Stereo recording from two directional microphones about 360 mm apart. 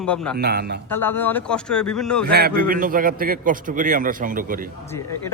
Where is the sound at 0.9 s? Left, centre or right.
Centre.